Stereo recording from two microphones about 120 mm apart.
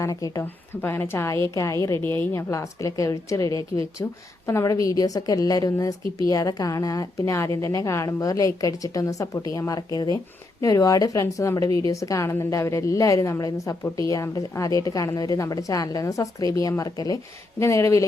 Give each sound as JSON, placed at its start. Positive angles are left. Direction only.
{"t": 0.0, "sound": "a woman's voice", "side_deg": 30}
{"t": 0.8, "sound": "a woman's voice", "side_deg": 20}